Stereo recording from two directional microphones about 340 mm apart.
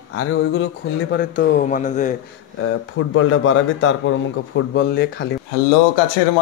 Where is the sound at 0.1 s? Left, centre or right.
Left.